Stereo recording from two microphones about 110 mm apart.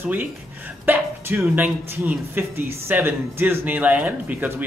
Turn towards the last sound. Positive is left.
turn(degrees=-20)  # may be behind; listen again after turning